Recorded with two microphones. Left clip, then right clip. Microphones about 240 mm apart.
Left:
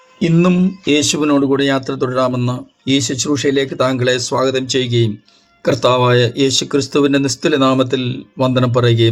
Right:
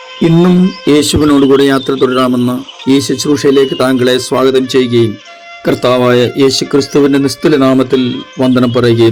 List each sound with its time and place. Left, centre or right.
0.2 s speech: right